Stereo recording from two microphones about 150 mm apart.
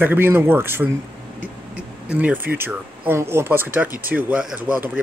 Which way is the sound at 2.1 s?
10° right (ahead or behind).